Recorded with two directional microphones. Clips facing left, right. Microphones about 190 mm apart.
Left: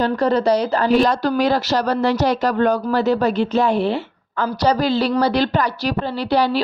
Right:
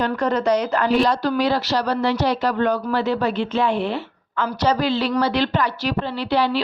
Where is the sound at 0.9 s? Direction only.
45° left (ahead or behind).